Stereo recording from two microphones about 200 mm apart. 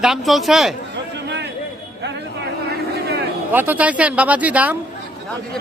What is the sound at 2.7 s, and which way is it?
Vehicle, 55° right (ahead or behind).